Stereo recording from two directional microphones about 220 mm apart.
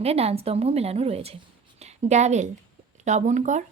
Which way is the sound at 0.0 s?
30° right (ahead or behind).